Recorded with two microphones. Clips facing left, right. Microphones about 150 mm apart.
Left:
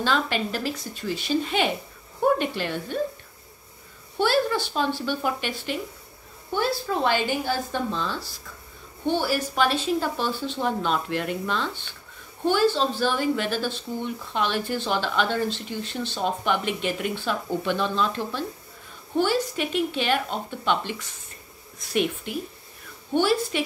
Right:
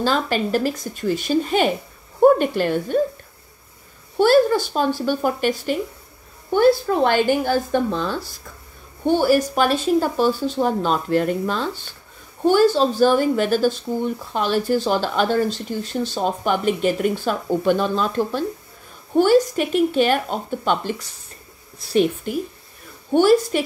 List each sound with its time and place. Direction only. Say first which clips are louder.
0.0 s speech: right 4 dB; 40° right (ahead or behind)
4.2 s speech: right 8 dB; 45° right (ahead or behind)